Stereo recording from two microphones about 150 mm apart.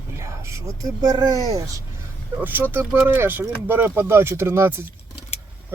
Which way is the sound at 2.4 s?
15° right (ahead or behind).